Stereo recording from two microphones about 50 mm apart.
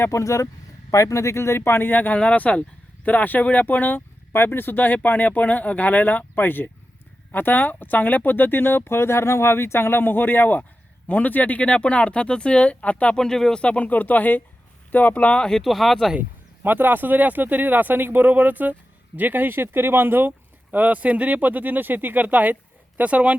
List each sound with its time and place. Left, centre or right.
0.0 s speech: left
2.1 s speech: left
13.1 s speech: centre
13.6 s speech: left
15.4 s speech: centre
16.6 s speech: right